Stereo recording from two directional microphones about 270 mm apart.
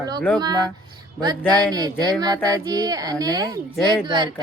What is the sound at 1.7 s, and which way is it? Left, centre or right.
Speech, centre.